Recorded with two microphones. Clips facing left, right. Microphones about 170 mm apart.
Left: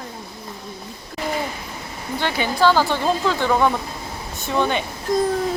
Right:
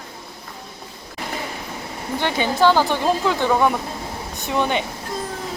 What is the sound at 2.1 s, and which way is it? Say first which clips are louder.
A woman's voice: right 1 dB; 20° right (ahead or behind).